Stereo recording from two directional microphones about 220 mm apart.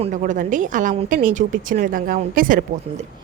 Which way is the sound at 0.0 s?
35° right (ahead or behind).